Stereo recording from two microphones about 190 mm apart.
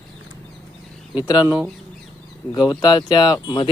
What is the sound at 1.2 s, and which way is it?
Speech, 20° left (ahead or behind).